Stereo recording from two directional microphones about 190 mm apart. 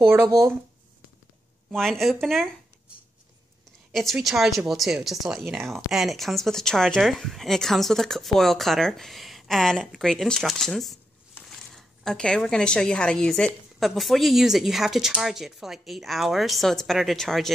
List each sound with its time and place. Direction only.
0.0 s speech: 15° right (ahead or behind)
1.7 s speech: centre (ahead or behind)
3.9 s speech: centre (ahead or behind)